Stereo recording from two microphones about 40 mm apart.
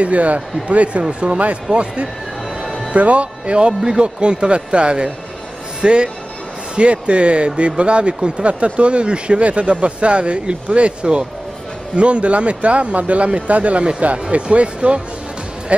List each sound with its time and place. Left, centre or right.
0.0 s speech: right